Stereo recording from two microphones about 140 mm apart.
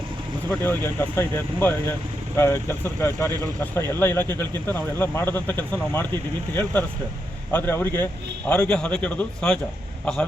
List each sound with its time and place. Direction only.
0.6 s speech: 15° left (ahead or behind)